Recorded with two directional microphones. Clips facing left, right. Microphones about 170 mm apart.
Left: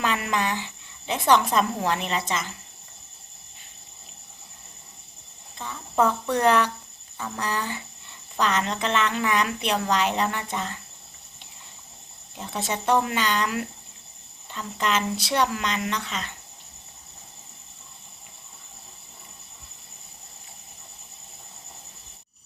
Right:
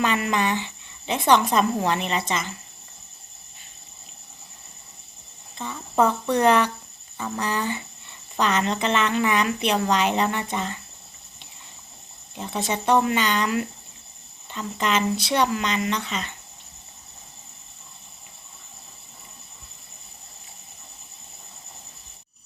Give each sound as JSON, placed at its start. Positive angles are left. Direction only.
{"t": 0.0, "sound": "speech", "side_deg": 0}
{"t": 5.5, "sound": "speech", "side_deg": 0}
{"t": 12.4, "sound": "speech", "side_deg": 0}